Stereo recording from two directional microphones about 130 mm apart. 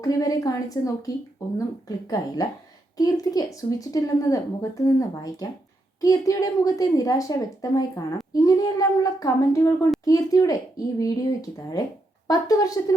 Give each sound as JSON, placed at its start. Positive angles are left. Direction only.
{"t": 0.0, "sound": "speech", "side_deg": 30}